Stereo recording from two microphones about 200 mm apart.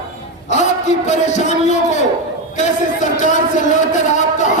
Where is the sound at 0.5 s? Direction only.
35° left (ahead or behind).